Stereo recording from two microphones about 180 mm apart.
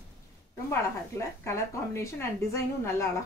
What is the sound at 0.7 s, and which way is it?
Speech, 15° left (ahead or behind).